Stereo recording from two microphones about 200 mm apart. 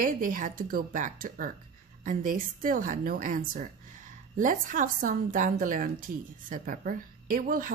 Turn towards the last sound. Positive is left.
turn(degrees=-45)  # may be behind; listen again after turning